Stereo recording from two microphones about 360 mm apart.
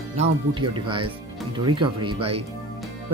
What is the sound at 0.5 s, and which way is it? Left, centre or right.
Speech, centre.